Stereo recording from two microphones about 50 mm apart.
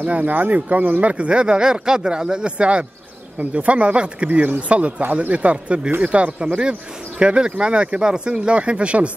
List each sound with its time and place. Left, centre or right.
0.0 s speech: right